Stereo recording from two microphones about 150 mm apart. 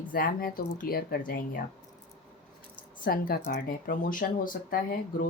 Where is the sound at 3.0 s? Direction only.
75° left (ahead or behind).